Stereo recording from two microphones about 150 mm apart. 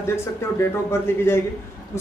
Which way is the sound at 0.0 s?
20° left (ahead or behind).